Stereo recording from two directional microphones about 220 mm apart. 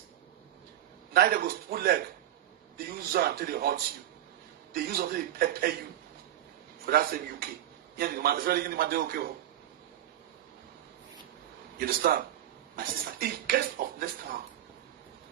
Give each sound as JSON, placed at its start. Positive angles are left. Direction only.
{"t": 1.1, "sound": "a man's voice", "side_deg": -45}
{"t": 6.8, "sound": "a man's voice", "side_deg": -40}
{"t": 11.8, "sound": "a man's voice", "side_deg": -40}